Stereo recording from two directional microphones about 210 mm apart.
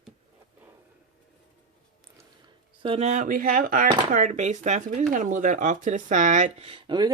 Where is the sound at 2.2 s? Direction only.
25° right (ahead or behind); by 3.9 s 40° right (ahead or behind).